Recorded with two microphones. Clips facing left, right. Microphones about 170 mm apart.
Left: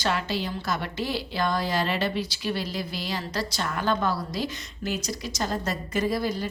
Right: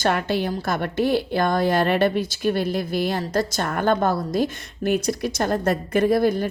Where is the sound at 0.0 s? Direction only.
55° right (ahead or behind).